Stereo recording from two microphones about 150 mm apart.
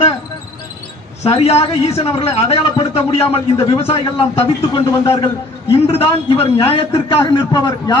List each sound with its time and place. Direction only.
1.2 s a man's voice: 40° left (ahead or behind)